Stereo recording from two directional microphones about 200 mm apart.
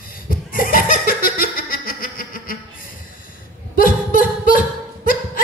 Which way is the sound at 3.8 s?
45° left (ahead or behind).